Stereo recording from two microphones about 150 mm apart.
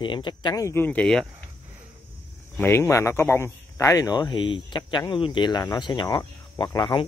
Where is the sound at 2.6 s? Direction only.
15° left (ahead or behind).